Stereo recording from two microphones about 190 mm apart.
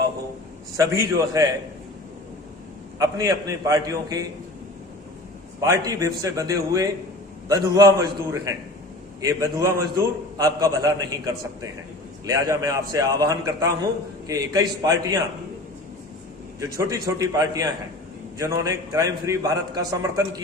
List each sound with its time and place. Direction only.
0.8 s a man's voice: 15° right (ahead or behind)
3.0 s a man's voice: 20° right (ahead or behind)
5.5 s a man's voice: 20° right (ahead or behind)
16.6 s a man's voice: 15° right (ahead or behind)